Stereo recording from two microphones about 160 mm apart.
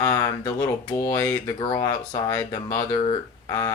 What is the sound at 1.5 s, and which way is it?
Speech, 25° left (ahead or behind).